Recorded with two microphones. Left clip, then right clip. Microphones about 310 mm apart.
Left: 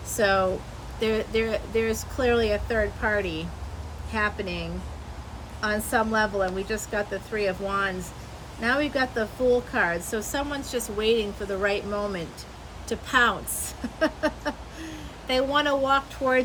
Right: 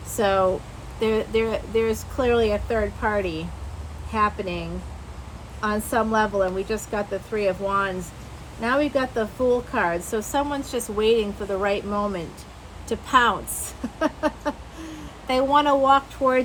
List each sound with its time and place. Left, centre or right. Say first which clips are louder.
0.2 s speech: right 2 dB; centre